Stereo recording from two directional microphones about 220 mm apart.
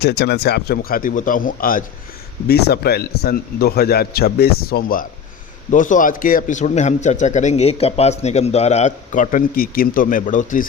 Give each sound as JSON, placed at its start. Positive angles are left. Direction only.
{"t": 0.0, "sound": "a man's voice", "side_deg": 50}